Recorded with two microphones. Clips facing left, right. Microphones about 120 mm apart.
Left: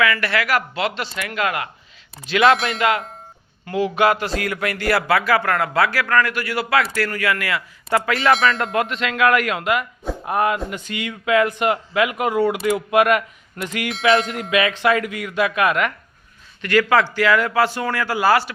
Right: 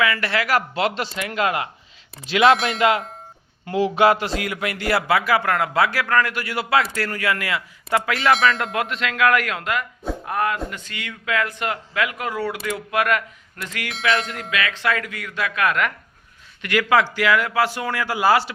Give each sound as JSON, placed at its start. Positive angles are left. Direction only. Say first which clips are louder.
{"t": 0.0, "sound": "speech", "louder": "left 2 dB", "side_deg": -25}
{"t": 2.6, "sound": "a man's voice", "louder": "even", "side_deg": 0}
{"t": 3.7, "sound": "speech", "louder": "right 1 dB", "side_deg": -25}
{"t": 7.9, "sound": "a man's voice", "louder": "left 2 dB", "side_deg": 0}
{"t": 14.0, "sound": "a sound", "louder": "left 5 dB", "side_deg": 20}
{"t": 14.5, "sound": "speech", "louder": "left 6 dB", "side_deg": 20}
{"t": 16.6, "sound": "a man's voice", "louder": "left 2 dB", "side_deg": -15}